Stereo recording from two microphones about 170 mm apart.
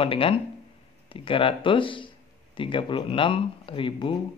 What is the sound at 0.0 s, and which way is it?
Speech, 30° left (ahead or behind).